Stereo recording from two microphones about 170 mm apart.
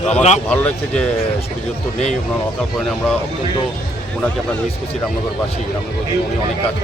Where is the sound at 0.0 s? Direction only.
40° left (ahead or behind).